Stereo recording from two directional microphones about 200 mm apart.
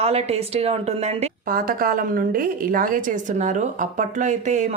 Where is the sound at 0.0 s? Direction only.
30° right (ahead or behind).